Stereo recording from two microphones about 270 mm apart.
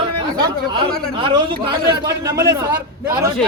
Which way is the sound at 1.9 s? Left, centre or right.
Centre.